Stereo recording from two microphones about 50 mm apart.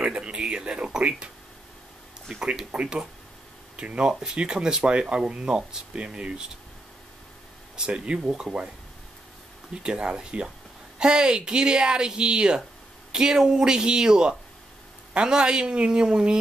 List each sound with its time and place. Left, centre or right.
0.0 s a sound: centre
2.4 s speech: centre
7.7 s speech: centre
9.8 s speech: centre